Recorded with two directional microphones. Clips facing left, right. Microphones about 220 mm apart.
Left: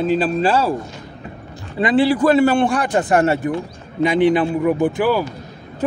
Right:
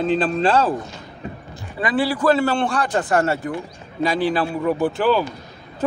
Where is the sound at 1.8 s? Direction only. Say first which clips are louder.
Left 4 dB; 25° left (ahead or behind).